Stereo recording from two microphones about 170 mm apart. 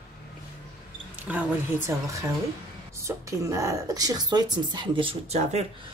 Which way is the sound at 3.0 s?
15° right (ahead or behind).